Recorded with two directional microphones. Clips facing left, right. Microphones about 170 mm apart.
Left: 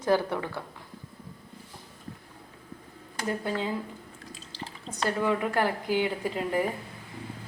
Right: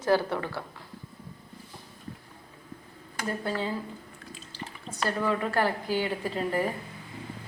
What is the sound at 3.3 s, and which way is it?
Speech, 15° left (ahead or behind).